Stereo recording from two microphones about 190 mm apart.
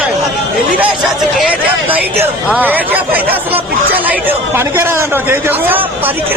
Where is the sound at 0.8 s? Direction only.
5° right (ahead or behind).